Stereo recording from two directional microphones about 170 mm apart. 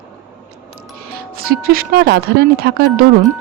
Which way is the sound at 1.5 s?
60° right (ahead or behind).